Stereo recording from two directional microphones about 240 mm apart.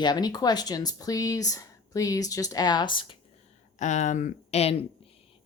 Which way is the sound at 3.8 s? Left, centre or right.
Left.